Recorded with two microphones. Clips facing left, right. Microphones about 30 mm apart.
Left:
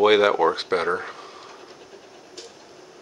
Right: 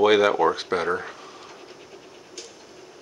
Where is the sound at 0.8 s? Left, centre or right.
Centre.